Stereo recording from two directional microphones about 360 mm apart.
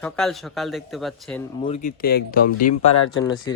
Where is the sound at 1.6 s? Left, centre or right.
Centre.